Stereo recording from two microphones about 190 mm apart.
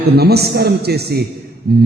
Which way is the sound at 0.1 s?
55° right (ahead or behind).